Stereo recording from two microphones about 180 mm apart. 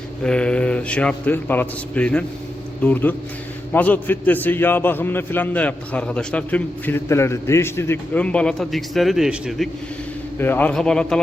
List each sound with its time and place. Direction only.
0.2 s a man's voice: 5° left (ahead or behind)
10.3 s a man's voice: 10° left (ahead or behind)